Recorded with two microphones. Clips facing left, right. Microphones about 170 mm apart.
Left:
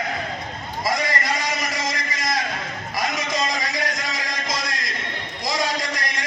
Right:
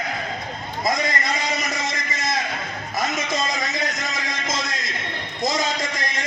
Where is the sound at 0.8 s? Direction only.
20° right (ahead or behind).